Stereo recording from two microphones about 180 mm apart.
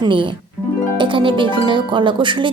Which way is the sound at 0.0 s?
25° right (ahead or behind).